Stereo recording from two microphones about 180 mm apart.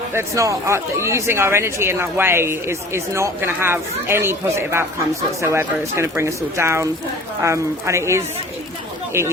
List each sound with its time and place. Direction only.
0.1 s speech: 15° right (ahead or behind)